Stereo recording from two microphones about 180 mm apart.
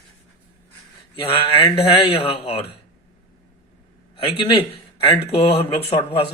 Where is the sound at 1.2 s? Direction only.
30° left (ahead or behind).